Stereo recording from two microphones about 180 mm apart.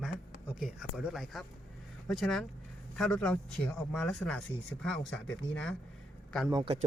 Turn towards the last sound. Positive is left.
turn(degrees=-30)  # may be behind; listen again after turning